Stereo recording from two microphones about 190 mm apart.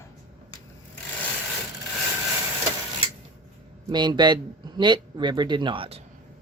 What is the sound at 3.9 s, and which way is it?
Speech, 20° right (ahead or behind).